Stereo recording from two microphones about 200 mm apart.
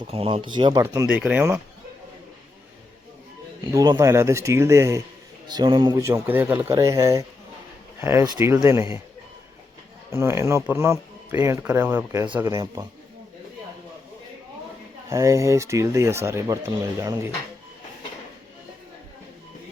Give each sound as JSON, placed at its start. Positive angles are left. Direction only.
{"t": 0.1, "sound": "speech", "side_deg": -30}
{"t": 3.7, "sound": "speech", "side_deg": -15}
{"t": 10.1, "sound": "speech", "side_deg": -15}
{"t": 15.1, "sound": "speech", "side_deg": -15}